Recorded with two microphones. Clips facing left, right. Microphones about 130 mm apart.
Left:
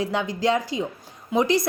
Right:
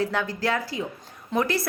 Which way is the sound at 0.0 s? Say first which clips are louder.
Left 2 dB; 15° left (ahead or behind).